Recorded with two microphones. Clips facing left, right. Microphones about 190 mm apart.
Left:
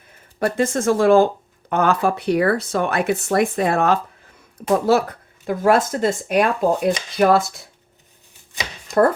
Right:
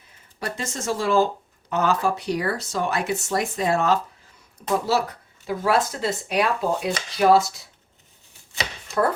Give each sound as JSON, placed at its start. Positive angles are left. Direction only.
{"t": 0.3, "sound": "speech", "side_deg": 55}